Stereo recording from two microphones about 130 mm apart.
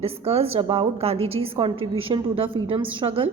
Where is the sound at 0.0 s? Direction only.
50° right (ahead or behind).